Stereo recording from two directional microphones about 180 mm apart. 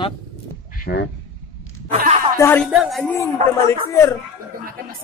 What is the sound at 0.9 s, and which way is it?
Speech, 65° left (ahead or behind).